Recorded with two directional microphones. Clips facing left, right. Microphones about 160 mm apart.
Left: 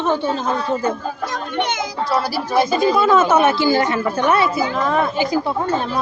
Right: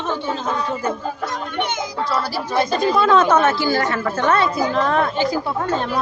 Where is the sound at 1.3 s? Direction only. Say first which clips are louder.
Left 4 dB; 90° left.